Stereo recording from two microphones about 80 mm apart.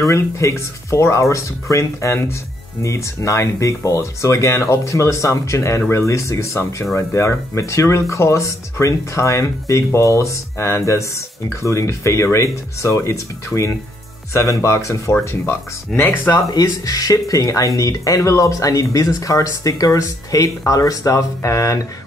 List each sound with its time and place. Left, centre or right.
0.0 s speech: left
15.9 s speech: centre
16.3 s speech: left